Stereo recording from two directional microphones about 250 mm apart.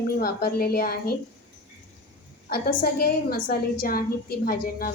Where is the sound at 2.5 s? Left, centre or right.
Left.